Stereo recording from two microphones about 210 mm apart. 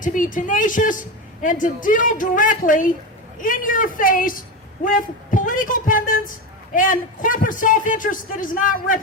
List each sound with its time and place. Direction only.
0.0 s a woman's voice: 40° left (ahead or behind)